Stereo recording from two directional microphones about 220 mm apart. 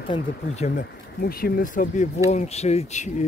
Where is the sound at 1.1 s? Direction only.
45° left (ahead or behind).